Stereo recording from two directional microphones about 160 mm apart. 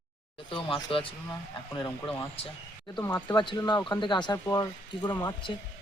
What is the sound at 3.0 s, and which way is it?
Speech, 15° left (ahead or behind).